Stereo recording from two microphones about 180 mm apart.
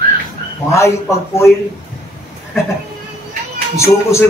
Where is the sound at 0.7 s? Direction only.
15° left (ahead or behind).